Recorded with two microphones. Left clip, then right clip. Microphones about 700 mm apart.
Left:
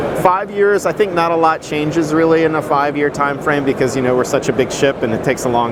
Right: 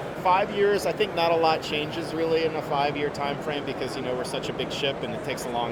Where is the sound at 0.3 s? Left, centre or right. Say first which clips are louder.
Left 7 dB; left.